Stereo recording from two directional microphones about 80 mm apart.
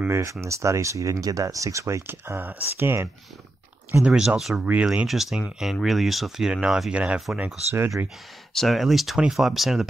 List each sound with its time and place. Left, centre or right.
0.1 s speech: right
4.0 s speech: centre
7.7 s speech: right
8.5 s speech: centre